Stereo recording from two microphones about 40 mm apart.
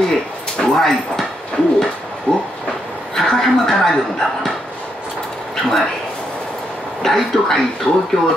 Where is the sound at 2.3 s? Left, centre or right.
Left.